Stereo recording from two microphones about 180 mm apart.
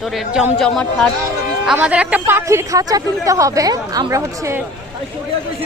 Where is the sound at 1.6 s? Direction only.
5° right (ahead or behind).